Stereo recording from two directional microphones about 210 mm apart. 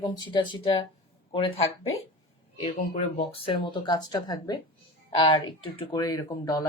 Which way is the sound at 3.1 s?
25° left (ahead or behind).